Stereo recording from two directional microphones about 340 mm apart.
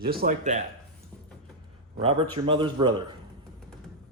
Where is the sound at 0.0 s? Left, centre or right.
Right.